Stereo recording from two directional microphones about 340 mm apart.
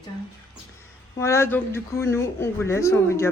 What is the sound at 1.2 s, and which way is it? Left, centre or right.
Speech, centre.